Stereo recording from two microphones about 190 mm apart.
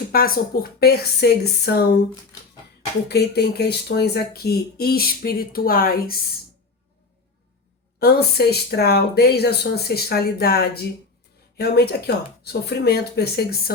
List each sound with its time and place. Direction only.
0.1 s speech: 50° left (ahead or behind)
3.1 s speech: 60° left (ahead or behind)
7.9 s speech: 55° left (ahead or behind)